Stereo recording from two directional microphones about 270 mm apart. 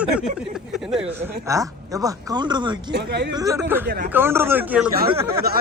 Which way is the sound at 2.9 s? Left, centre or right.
Right.